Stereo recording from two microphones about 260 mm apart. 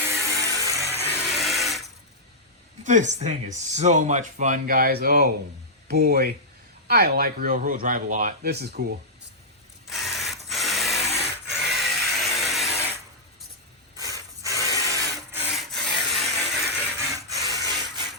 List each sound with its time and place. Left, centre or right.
0.0 s music: centre
0.9 s a sound: centre
2.8 s speech: right
9.8 s mechanisms: centre
11.4 s a sound: centre
13.9 s ratchet: centre
15.3 s wood: centre
17.2 s rub: centre